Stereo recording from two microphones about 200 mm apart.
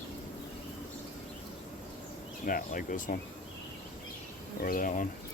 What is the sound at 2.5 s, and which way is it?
Speech, 45° left (ahead or behind).